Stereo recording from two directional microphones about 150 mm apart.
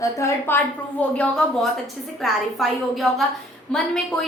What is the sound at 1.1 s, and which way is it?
A woman's voice, 5° left (ahead or behind).